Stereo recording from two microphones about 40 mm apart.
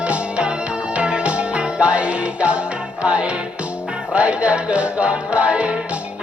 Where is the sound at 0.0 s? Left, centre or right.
Right.